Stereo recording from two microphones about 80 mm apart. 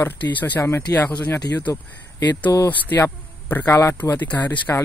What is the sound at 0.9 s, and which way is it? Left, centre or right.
Speech, left.